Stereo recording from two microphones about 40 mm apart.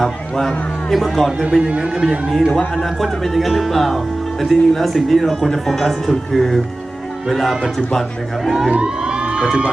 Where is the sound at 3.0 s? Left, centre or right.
Centre.